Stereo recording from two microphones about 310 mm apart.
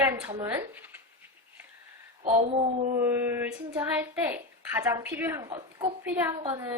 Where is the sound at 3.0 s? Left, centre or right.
Centre.